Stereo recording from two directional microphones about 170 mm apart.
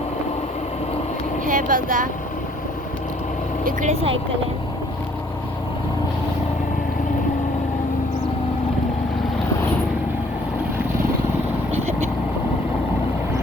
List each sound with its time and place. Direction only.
1.5 s speech: 50° right (ahead or behind)
3.6 s speech: 50° right (ahead or behind)